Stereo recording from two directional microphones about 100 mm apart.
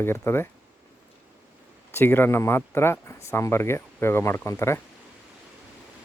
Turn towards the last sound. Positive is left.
turn(degrees=30)  # may be behind; listen again after turning